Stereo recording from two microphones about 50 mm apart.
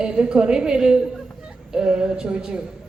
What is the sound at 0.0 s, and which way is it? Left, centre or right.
A woman's voice, centre.